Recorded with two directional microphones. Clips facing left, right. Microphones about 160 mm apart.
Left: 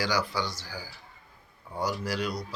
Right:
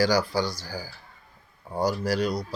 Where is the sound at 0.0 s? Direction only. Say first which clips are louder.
Right 6 dB; 40° right (ahead or behind).